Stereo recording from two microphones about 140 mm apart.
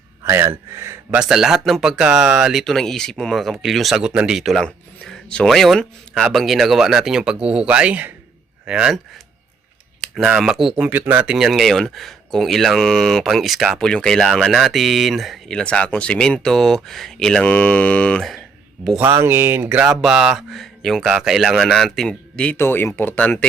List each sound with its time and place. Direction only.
0.3 s speech: 20° right (ahead or behind)
1.2 s speech: 5° right (ahead or behind)
10.0 s speech: 5° right (ahead or behind)
18.9 s speech: 15° right (ahead or behind)
19.9 s speech: centre (ahead or behind)
22.5 s speech: 15° left (ahead or behind)